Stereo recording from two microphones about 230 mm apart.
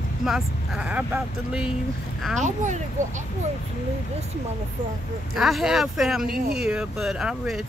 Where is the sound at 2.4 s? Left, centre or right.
Right.